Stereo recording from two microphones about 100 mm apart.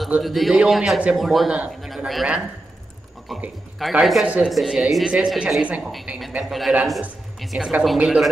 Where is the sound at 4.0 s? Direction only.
5° right (ahead or behind).